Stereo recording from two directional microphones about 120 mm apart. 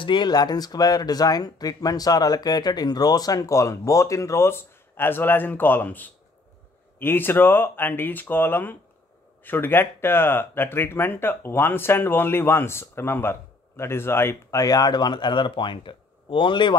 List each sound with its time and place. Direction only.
0.0 s speech: 40° left (ahead or behind)